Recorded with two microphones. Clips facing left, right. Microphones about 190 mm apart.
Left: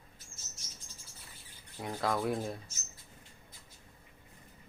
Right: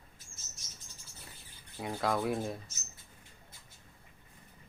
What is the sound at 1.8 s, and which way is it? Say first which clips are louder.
Speech: right 1 dB; centre (ahead or behind).